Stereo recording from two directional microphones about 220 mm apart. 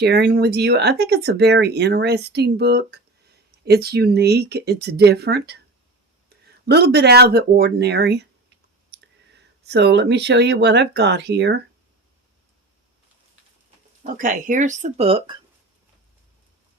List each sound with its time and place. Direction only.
0.0 s speech: 45° right (ahead or behind)
14.0 s speech: 35° right (ahead or behind)